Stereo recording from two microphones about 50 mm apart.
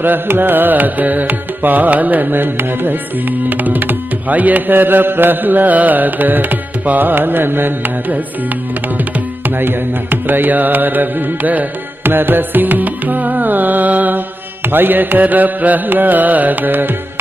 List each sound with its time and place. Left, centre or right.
0.0 s tabla: right
10.2 s tabla: right